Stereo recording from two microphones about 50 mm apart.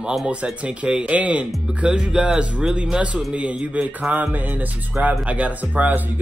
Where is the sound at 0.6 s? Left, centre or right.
Right.